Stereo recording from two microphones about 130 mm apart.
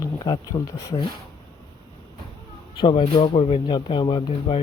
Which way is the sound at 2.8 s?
40° left (ahead or behind).